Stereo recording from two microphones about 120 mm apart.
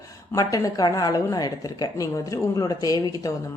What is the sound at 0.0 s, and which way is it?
A woman's voice, 30° left (ahead or behind).